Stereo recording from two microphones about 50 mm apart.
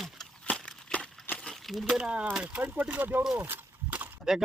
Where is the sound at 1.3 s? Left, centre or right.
Left.